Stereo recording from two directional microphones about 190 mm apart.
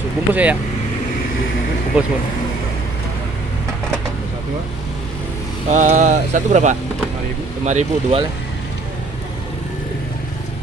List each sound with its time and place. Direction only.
0.3 s speech: 10° right (ahead or behind)
2.0 s speech: 5° right (ahead or behind)
5.7 s speech: 40° right (ahead or behind)